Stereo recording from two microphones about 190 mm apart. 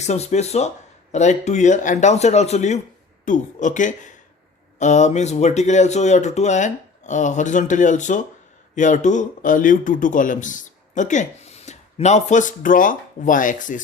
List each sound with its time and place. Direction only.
0.0 s speech: 35° left (ahead or behind)